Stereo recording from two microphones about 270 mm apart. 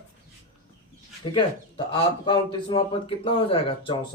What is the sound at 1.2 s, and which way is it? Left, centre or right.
Speech, centre.